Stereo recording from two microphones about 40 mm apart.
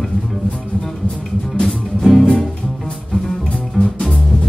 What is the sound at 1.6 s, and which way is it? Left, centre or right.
Music, centre.